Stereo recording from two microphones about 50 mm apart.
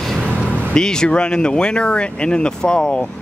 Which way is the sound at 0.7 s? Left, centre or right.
Centre.